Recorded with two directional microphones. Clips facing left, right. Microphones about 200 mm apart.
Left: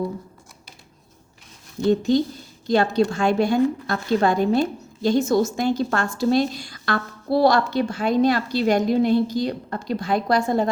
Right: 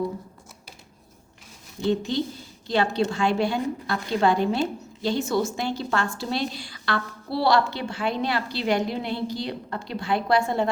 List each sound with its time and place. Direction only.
1.8 s a woman's voice: 45° left (ahead or behind)